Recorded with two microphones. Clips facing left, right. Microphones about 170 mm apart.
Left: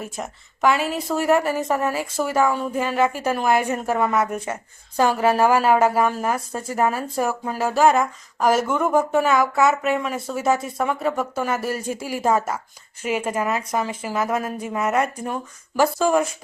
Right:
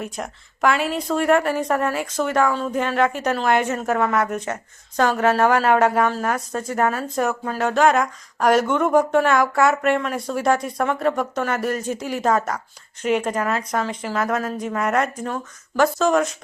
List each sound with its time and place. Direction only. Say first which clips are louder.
0.0 s speech: right 1 dB; centre (ahead or behind)